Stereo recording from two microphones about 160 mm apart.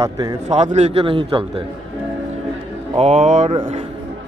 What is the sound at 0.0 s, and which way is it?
Speech, 20° right (ahead or behind).